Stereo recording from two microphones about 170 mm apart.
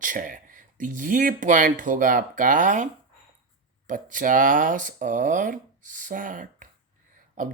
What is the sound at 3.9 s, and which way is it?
Speech, 50° right (ahead or behind).